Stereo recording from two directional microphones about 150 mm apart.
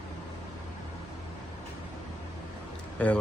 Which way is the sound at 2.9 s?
10° left (ahead or behind).